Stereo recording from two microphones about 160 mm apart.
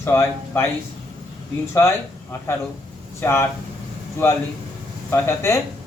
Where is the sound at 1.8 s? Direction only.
15° left (ahead or behind).